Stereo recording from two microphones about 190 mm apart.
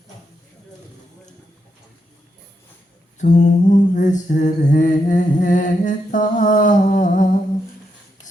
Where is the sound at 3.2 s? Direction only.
40° left (ahead or behind).